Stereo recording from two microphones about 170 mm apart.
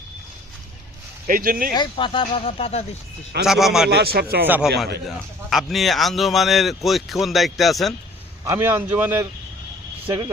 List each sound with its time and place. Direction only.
1.3 s speech: 55° right (ahead or behind)
1.7 s speech: 25° left (ahead or behind)
3.4 s a man's voice: centre (ahead or behind)
3.8 s a man's voice: 70° right (ahead or behind)
4.4 s speech: 10° right (ahead or behind)
5.0 s a man's voice: centre (ahead or behind)
8.4 s speech: 15° right (ahead or behind)
10.1 s speech: 25° right (ahead or behind)